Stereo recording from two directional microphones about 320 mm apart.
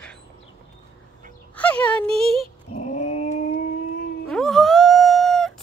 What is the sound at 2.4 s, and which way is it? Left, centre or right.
Dog, left.